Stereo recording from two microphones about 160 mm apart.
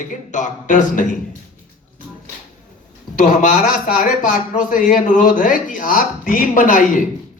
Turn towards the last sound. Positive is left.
turn(degrees=55)  # may be behind; listen again after turning